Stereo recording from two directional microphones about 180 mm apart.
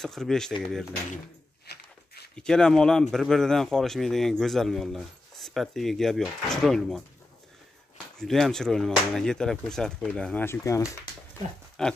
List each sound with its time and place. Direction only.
0.0 s a man's voice: centre (ahead or behind)
1.7 s a sound: 65° left (ahead or behind)
2.3 s a man's voice: 5° left (ahead or behind)
8.2 s a man's voice: centre (ahead or behind); by 11.0 s 15° left (ahead or behind)
11.8 s speech: centre (ahead or behind)